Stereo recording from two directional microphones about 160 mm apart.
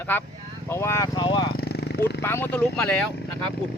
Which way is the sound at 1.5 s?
80° left.